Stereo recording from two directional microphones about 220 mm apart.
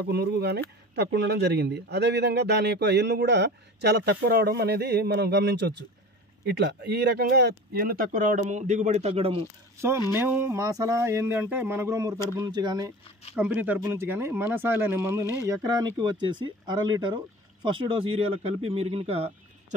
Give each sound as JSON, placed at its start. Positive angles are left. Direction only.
{"t": 0.0, "sound": "speech", "side_deg": -50}
{"t": 10.1, "sound": "speech", "side_deg": -10}
{"t": 13.4, "sound": "speech", "side_deg": -5}